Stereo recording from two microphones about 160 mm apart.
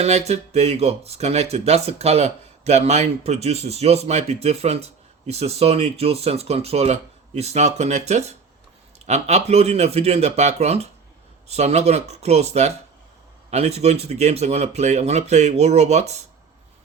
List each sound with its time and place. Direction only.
0.0 s speech: 40° right (ahead or behind)